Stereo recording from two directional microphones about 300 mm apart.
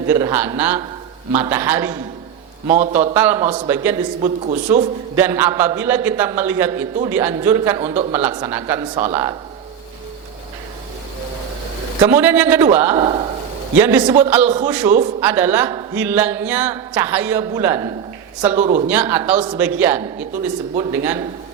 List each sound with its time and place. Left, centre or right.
0.1 s speech: centre
2.6 s a man's voice: right
3.2 s speech: centre
4.2 s a man's voice: right
5.1 s speech: centre
12.0 s speech: centre
12.9 s a man's voice: centre
18.5 s a man's voice: right
18.9 s speech: centre